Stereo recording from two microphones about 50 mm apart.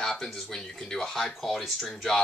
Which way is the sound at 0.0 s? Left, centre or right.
Centre.